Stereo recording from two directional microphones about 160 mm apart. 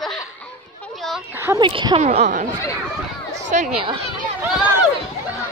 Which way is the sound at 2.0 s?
45° right (ahead or behind).